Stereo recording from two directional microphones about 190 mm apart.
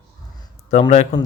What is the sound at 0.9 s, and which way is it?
Speech, 35° left (ahead or behind).